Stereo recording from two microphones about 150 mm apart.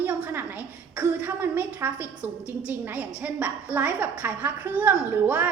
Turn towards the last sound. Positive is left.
turn(degrees=-10)  # may be behind; listen again after turning